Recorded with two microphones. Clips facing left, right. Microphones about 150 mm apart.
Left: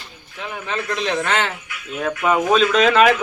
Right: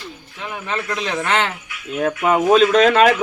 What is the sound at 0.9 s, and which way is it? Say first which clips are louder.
Speech: left 4 dB; 15° right (ahead or behind).